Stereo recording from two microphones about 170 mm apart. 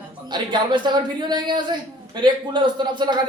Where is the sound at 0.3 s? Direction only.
25° right (ahead or behind).